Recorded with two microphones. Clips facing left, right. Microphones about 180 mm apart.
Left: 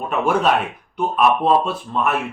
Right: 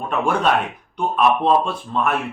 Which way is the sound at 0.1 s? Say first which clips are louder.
Left 1 dB; 5° left (ahead or behind).